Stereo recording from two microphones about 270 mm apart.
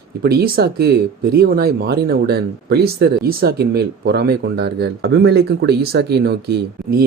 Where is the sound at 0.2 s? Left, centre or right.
Right.